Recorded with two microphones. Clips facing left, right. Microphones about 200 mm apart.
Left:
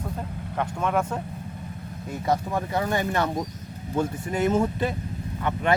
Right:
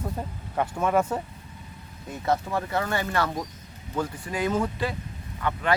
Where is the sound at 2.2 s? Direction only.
15° left (ahead or behind).